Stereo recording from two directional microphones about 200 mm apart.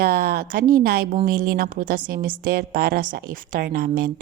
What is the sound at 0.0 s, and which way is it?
Speech, 50° right (ahead or behind).